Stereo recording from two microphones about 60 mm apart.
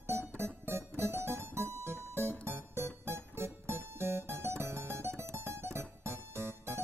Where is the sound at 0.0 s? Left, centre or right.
Right.